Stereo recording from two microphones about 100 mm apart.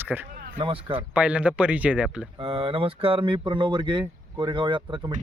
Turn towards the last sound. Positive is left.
turn(degrees=-50)  # may be behind; listen again after turning